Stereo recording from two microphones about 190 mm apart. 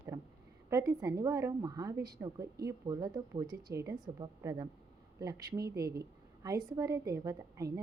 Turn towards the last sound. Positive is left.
turn(degrees=-15)  # may be behind; listen again after turning